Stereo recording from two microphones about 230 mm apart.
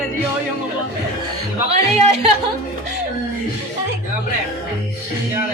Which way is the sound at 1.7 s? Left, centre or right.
Right.